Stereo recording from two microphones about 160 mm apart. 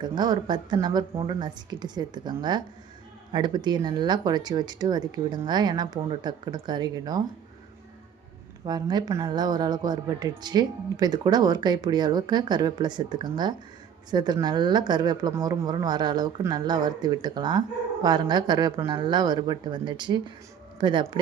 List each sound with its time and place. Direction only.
0.0 s speech: 25° right (ahead or behind)
8.6 s speech: 25° right (ahead or behind)